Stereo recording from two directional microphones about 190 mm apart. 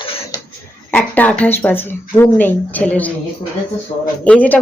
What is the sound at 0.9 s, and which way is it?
Speech, 10° left (ahead or behind).